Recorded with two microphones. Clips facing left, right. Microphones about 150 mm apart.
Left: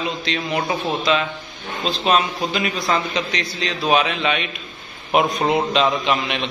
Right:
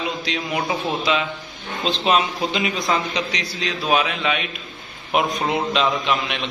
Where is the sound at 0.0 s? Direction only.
10° right (ahead or behind).